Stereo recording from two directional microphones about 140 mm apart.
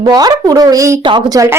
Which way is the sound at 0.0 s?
30° right (ahead or behind).